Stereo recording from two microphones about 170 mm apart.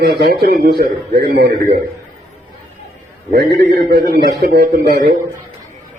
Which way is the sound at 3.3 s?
70° right (ahead or behind).